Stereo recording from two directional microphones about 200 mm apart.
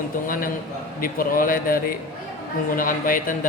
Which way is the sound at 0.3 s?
45° left (ahead or behind).